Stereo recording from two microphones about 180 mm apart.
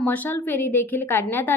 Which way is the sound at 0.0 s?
10° left (ahead or behind).